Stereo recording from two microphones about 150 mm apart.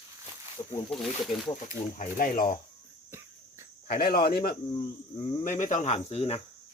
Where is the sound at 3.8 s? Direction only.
85° left.